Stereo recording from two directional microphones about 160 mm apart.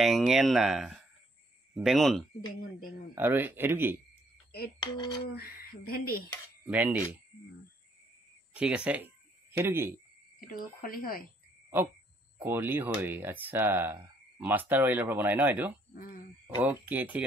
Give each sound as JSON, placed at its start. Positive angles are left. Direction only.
{"t": 0.0, "sound": "speech", "side_deg": 0}
{"t": 3.2, "sound": "speech", "side_deg": -15}
{"t": 4.7, "sound": "a sound", "side_deg": 30}
{"t": 5.3, "sound": "speech", "side_deg": 65}
{"t": 6.6, "sound": "speech", "side_deg": -10}
{"t": 8.5, "sound": "speech", "side_deg": -5}
{"t": 10.4, "sound": "speech", "side_deg": 60}
{"t": 12.4, "sound": "speech", "side_deg": -10}
{"t": 15.9, "sound": "speech", "side_deg": 60}
{"t": 16.6, "sound": "speech", "side_deg": -10}